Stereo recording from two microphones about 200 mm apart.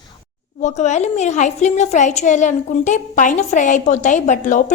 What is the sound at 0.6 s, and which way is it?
A woman's voice, 35° left (ahead or behind).